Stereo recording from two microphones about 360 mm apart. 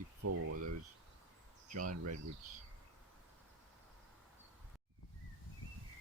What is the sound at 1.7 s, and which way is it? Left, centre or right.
Speech, right.